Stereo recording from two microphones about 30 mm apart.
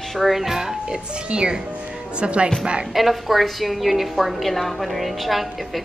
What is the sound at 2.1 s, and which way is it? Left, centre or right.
Speech, right.